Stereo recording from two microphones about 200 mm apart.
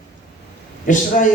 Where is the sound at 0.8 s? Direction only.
40° left (ahead or behind).